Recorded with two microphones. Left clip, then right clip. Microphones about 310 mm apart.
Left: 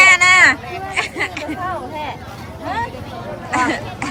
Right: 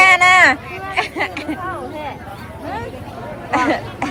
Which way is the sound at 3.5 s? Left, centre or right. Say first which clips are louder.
Right 1 dB; centre.